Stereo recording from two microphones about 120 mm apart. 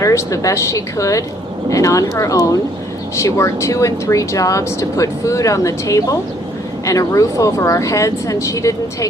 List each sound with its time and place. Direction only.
0.0 s speech: 25° left (ahead or behind)